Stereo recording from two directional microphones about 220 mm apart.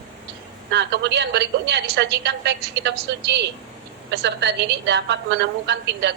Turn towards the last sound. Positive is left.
turn(degrees=-50)  # may be behind; listen again after turning